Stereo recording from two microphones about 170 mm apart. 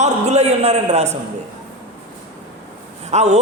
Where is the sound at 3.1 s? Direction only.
40° right (ahead or behind).